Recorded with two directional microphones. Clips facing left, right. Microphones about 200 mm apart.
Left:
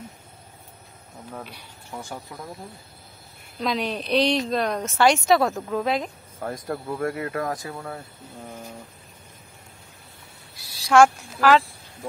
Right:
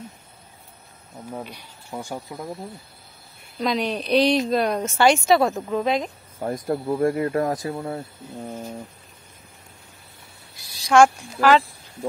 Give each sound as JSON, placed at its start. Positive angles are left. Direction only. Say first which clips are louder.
{"t": 1.9, "sound": "speech", "louder": "right 4 dB", "side_deg": -15}
{"t": 3.5, "sound": "a woman's voice", "louder": "right 2 dB", "side_deg": 0}
{"t": 6.4, "sound": "speech", "louder": "right 5 dB", "side_deg": -25}
{"t": 10.9, "sound": "a woman's voice", "louder": "right 1 dB", "side_deg": 0}